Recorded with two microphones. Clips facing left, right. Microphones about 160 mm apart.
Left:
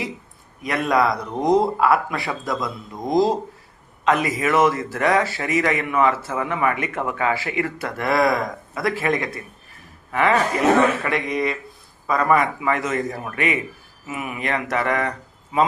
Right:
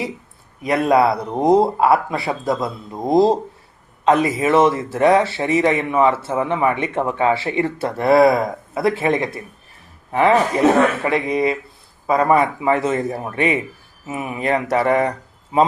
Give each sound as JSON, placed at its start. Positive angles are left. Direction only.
{"t": 0.6, "sound": "speech", "side_deg": -30}